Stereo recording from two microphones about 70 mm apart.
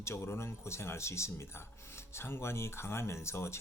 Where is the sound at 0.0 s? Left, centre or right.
Left.